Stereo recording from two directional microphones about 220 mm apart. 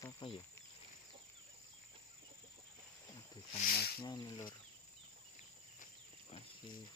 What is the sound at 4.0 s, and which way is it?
Speech, 20° left (ahead or behind).